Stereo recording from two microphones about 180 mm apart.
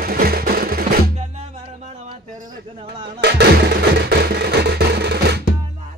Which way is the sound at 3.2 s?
65° right (ahead or behind).